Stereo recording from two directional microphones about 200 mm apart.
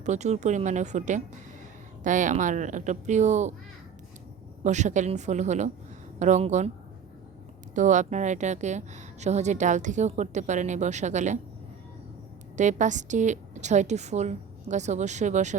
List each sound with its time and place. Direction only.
0.0 s a woman's voice: 35° right (ahead or behind)
4.6 s a woman's voice: 35° right (ahead or behind)
7.8 s a woman's voice: 35° right (ahead or behind)
12.5 s a woman's voice: 35° right (ahead or behind)